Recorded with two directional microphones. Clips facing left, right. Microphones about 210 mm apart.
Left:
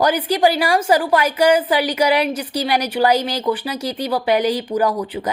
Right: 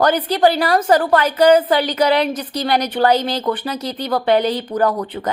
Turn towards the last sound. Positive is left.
turn(degrees=10)  # may be behind; listen again after turning